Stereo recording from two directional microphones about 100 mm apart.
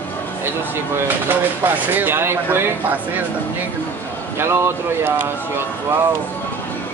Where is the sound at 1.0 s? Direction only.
20° right (ahead or behind).